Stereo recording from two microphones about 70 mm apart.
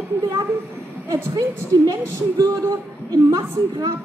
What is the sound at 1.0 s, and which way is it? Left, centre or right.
A woman's voice, right.